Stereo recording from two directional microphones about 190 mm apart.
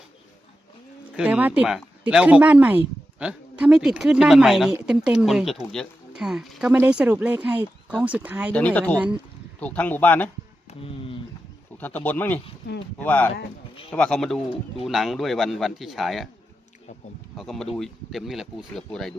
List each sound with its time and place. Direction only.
1.1 s speech: 5° right (ahead or behind)
8.5 s speech: 5° left (ahead or behind)
10.7 s speech: 30° left (ahead or behind)
11.8 s speech: 10° left (ahead or behind)
17.3 s speech: centre (ahead or behind)